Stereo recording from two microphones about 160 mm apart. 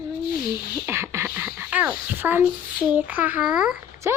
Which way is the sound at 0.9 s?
15° right (ahead or behind).